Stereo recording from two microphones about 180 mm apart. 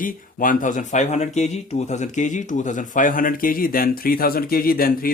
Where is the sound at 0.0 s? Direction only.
50° left (ahead or behind).